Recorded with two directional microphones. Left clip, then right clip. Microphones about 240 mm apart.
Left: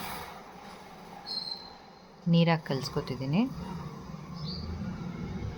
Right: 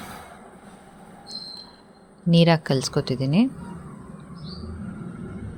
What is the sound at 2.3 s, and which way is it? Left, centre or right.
A woman's voice, right.